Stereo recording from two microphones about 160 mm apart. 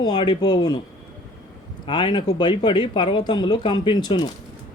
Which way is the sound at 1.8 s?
30° left (ahead or behind).